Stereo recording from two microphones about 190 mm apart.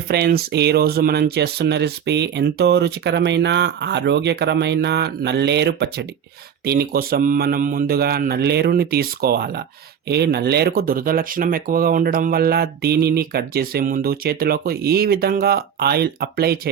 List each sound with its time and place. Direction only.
0.1 s speech: 55° right (ahead or behind)